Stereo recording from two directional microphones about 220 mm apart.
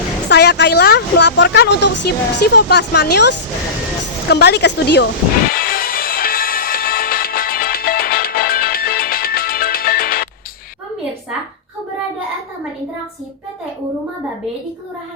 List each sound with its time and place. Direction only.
0.3 s a woman's voice: 50° left (ahead or behind)
5.5 s music: 40° left (ahead or behind)